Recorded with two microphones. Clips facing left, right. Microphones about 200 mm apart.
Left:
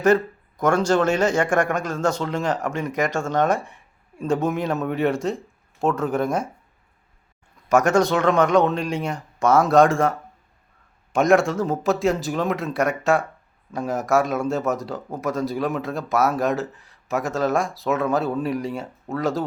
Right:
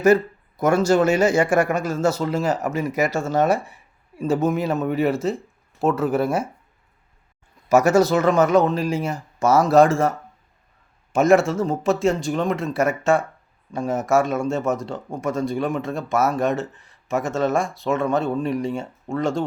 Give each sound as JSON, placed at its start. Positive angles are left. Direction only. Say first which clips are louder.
{"t": 0.0, "sound": "a man's voice", "louder": "right 2 dB", "side_deg": -10}
{"t": 7.7, "sound": "a man's voice", "louder": "right 2 dB", "side_deg": -5}